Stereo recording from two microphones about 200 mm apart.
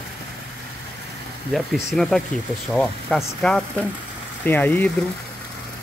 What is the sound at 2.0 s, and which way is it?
Speech, 5° left (ahead or behind).